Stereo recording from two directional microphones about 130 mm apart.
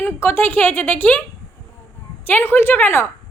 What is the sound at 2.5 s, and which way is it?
Speech, 15° left (ahead or behind).